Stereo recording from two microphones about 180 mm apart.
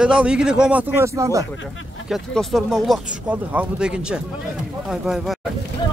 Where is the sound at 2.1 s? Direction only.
Centre (ahead or behind).